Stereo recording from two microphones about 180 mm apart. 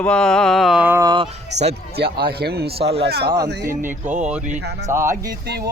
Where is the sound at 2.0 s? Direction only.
60° right (ahead or behind).